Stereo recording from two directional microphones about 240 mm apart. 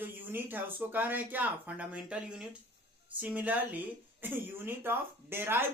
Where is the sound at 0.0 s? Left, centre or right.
Centre.